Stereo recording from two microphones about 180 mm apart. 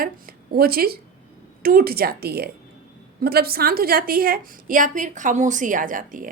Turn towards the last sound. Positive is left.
turn(degrees=-45)  # may be behind; listen again after turning